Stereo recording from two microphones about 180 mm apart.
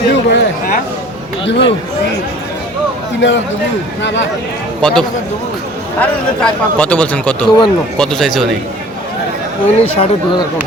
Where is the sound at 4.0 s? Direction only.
85° left.